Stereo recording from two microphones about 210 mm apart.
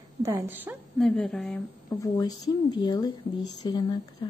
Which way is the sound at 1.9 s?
20° left (ahead or behind).